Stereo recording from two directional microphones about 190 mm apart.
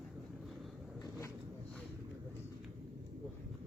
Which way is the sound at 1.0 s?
15° left (ahead or behind).